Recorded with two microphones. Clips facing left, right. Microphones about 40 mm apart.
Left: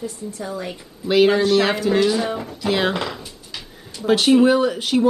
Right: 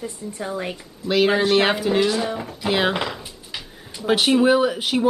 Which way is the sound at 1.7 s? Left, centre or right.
Centre.